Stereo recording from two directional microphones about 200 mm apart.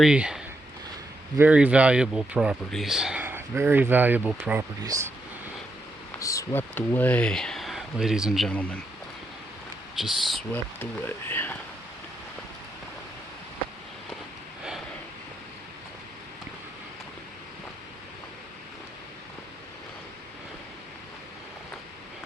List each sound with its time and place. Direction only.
0.0 s speech: 5° right (ahead or behind)
6.1 s speech: 15° left (ahead or behind)
10.0 s speech: 5° right (ahead or behind)
10.5 s speech: 10° left (ahead or behind)